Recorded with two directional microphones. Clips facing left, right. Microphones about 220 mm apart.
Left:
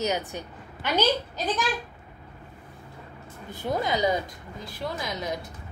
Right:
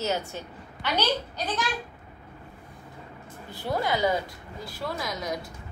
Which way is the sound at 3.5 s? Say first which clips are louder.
Left 1 dB; 20° left (ahead or behind).